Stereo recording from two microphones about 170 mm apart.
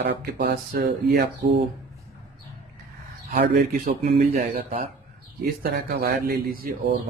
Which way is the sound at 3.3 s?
50° right (ahead or behind).